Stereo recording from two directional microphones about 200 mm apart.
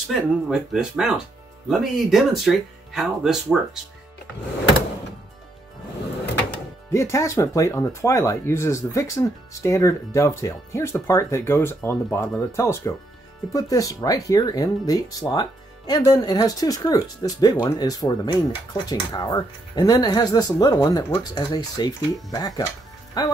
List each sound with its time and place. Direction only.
0.1 s speech: 5° right (ahead or behind)
6.9 s speech: 15° left (ahead or behind)